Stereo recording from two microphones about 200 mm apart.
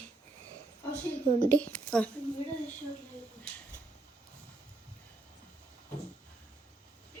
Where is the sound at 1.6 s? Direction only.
5° left (ahead or behind).